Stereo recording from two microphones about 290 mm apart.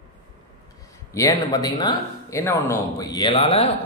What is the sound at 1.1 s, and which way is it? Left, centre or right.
Speech, centre.